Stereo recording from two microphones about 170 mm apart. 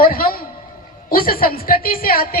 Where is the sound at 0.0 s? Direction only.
60° left (ahead or behind).